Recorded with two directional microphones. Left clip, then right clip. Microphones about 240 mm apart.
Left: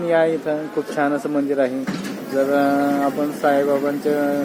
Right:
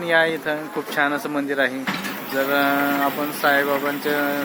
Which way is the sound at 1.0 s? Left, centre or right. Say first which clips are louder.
Left 1 dB; centre.